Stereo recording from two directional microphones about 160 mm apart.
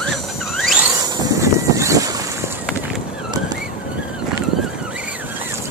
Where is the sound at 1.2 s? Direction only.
20° right (ahead or behind).